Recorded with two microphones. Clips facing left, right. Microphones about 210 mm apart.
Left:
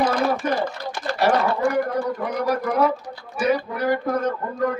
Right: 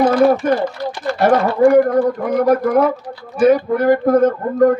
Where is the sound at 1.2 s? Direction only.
50° right (ahead or behind).